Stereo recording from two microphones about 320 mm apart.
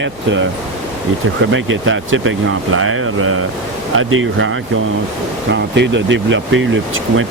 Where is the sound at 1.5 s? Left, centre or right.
Right.